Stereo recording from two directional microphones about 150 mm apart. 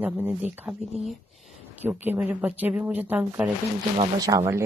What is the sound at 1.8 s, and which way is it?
Speech, 10° right (ahead or behind).